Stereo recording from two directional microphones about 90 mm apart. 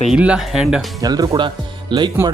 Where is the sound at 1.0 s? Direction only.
45° right (ahead or behind).